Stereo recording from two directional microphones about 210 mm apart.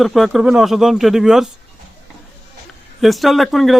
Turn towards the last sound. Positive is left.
turn(degrees=0)  # may be behind; listen again after turning